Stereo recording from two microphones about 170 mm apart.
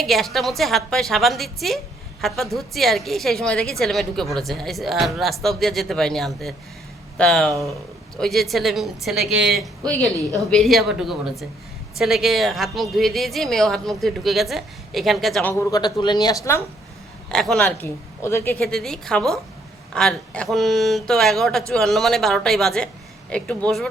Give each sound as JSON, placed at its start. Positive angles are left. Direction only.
{"t": 0.0, "sound": "a woman's voice", "side_deg": 0}
{"t": 15.5, "sound": "speech", "side_deg": 20}
{"t": 17.3, "sound": "a woman's voice", "side_deg": 5}
{"t": 18.6, "sound": "a woman's voice", "side_deg": 0}